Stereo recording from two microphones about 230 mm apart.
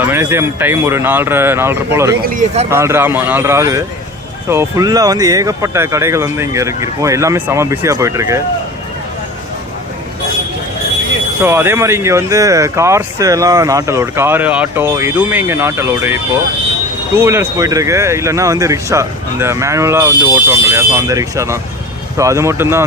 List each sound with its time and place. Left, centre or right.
0.0 s speech: centre
2.2 s speech: right
2.6 s speech: centre
11.4 s speech: centre